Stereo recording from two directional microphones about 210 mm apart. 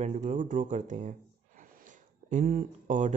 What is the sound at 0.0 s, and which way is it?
Speech, 35° right (ahead or behind).